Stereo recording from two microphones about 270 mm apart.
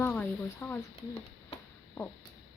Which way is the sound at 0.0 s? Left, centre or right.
Centre.